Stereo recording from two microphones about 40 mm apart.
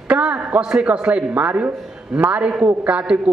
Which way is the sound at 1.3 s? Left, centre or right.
Right.